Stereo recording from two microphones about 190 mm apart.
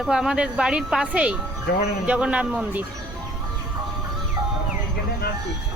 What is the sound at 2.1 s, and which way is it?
Speech, 5° right (ahead or behind).